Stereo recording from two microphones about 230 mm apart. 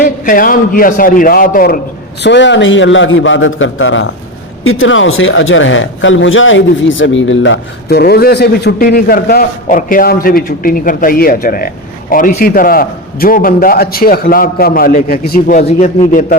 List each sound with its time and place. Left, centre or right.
0.0 s speech: left
2.2 s a man's voice: left